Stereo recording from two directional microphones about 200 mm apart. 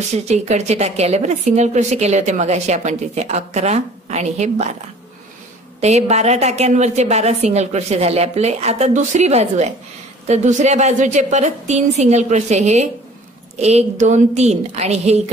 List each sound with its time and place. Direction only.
0.1 s a woman's voice: 35° right (ahead or behind)
5.8 s a woman's voice: 35° right (ahead or behind)